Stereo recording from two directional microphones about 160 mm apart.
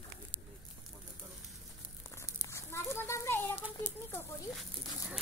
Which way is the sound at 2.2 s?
20° left (ahead or behind).